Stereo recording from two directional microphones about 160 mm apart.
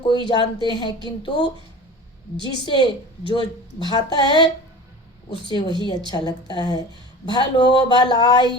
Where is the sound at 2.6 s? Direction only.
30° left (ahead or behind).